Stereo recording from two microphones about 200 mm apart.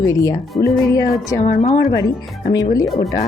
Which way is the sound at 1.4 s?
45° left (ahead or behind).